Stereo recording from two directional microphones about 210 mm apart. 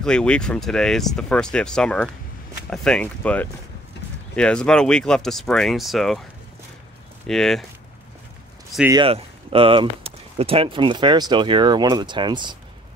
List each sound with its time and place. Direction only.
0.0 s speech: 5° left (ahead or behind)
7.2 s speech: centre (ahead or behind)
8.9 s speech: 25° right (ahead or behind)